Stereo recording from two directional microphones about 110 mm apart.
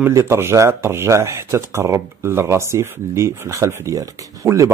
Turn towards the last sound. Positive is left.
turn(degrees=-30)  # may be behind; listen again after turning